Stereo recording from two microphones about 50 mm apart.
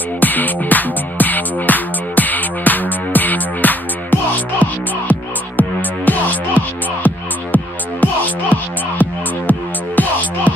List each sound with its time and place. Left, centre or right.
0.2 s music: left